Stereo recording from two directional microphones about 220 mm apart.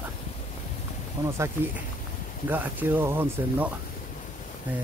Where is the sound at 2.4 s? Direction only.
10° right (ahead or behind).